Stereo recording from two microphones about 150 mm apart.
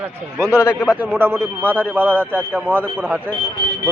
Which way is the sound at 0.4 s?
20° left (ahead or behind).